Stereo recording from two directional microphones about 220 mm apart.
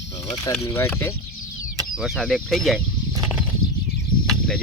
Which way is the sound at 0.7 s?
10° left (ahead or behind).